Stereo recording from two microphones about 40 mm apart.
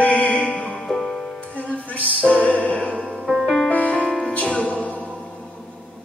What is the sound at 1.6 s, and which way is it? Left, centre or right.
Music, left.